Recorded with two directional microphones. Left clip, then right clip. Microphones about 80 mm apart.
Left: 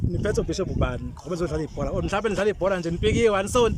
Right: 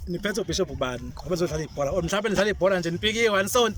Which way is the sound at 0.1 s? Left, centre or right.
Left.